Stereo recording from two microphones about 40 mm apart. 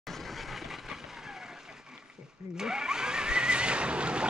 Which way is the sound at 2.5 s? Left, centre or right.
Centre.